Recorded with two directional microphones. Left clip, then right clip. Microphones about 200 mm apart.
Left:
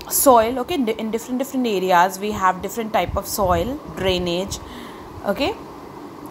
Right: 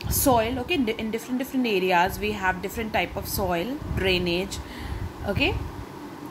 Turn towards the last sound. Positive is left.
turn(degrees=15)  # may be behind; listen again after turning